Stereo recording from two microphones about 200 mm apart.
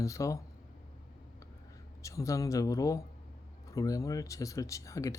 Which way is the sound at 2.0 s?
15° left (ahead or behind).